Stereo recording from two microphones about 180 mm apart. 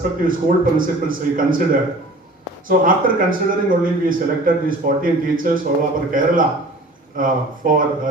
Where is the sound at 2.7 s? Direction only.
50° right (ahead or behind).